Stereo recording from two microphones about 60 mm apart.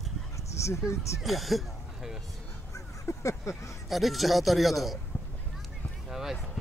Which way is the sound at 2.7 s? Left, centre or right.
Left.